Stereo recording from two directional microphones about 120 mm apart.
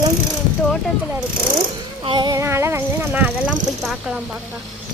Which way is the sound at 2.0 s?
40° right (ahead or behind).